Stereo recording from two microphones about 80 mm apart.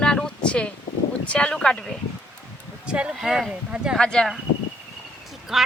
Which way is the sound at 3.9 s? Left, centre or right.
Centre.